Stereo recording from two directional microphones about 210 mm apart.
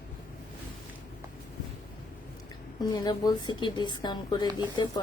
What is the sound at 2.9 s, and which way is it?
Speech, 20° left (ahead or behind).